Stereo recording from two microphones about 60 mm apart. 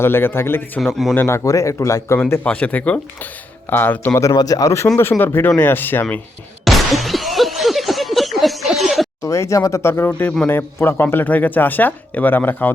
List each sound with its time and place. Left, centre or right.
0.0 s speech: left
0.8 s speech: centre
1.1 s speech: left
1.5 s speech: left
2.4 s speech: left
4.1 s speech: left
4.9 s speech: left
6.7 s a sound: centre
9.2 s speech: left
10.4 s speech: left
10.8 s speech: left